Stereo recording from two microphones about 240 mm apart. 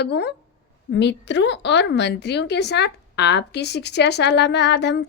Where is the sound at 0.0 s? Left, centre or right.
Left.